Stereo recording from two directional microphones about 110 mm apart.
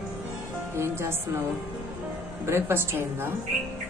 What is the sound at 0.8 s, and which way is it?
Speech, 25° right (ahead or behind).